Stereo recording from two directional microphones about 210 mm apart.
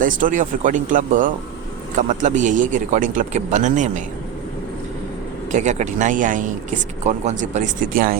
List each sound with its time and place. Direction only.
0.0 s speech: 40° right (ahead or behind)
5.5 s speech: 35° right (ahead or behind)